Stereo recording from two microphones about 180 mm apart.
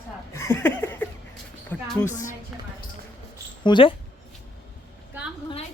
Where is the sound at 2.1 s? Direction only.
45° left (ahead or behind).